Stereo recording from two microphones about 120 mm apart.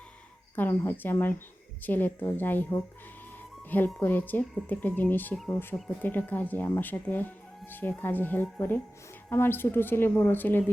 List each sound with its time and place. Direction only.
0.5 s speech: 20° left (ahead or behind)